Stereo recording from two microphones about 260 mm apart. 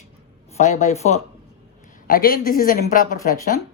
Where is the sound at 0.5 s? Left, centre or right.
Left.